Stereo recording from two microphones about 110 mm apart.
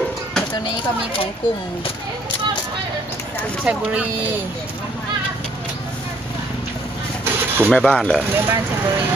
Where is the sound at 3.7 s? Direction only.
10° right (ahead or behind).